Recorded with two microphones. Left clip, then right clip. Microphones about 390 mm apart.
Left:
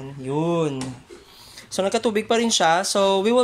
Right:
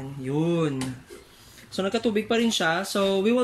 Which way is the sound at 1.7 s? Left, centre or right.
Centre.